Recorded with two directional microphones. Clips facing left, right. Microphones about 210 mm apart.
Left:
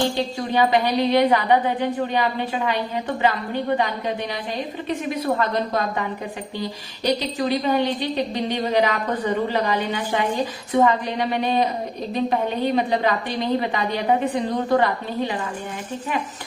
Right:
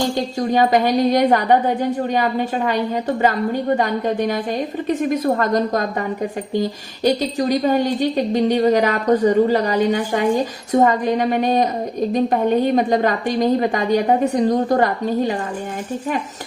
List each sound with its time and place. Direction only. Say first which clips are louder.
0.3 s a woman's voice: right 4 dB; 45° right (ahead or behind)